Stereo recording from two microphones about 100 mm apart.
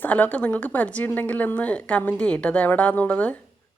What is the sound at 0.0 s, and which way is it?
A woman's voice, 15° left (ahead or behind).